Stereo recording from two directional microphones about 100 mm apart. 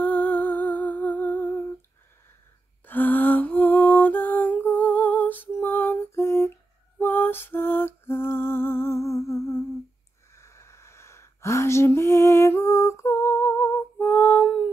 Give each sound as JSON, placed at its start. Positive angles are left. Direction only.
{"t": 0.0, "sound": "humming", "side_deg": 15}
{"t": 2.9, "sound": "lullaby", "side_deg": 20}
{"t": 10.3, "sound": "a sound", "side_deg": 30}